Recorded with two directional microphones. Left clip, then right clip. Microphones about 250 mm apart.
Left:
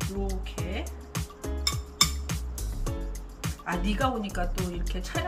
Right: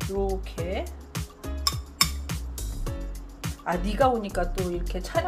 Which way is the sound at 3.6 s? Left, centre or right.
Right.